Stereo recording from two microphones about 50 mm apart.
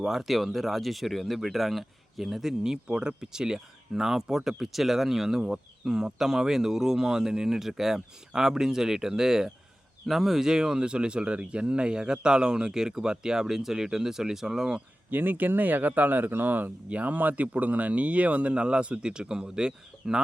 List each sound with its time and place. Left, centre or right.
0.0 s speech: centre
15.1 s speech: right; by 20.2 s centre